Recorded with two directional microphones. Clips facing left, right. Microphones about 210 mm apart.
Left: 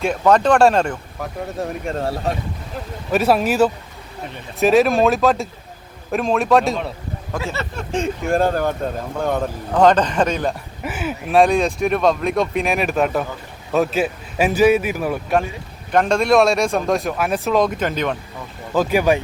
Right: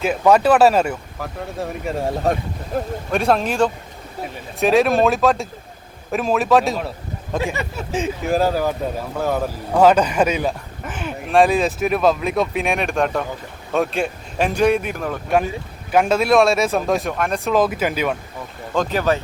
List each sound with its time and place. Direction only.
0.0 s speech: 5° right (ahead or behind)
2.7 s speech: 45° right (ahead or behind)
3.1 s speech: 5° left (ahead or behind)
7.3 s speech: 15° right (ahead or behind)
10.8 s speech: 5° left (ahead or behind)
15.9 s speech: 5° right (ahead or behind)
18.7 s speech: 10° left (ahead or behind)